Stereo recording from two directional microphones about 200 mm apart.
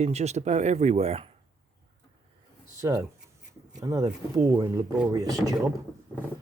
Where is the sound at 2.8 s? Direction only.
15° right (ahead or behind).